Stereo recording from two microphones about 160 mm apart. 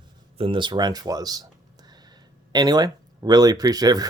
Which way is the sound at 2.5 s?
25° right (ahead or behind).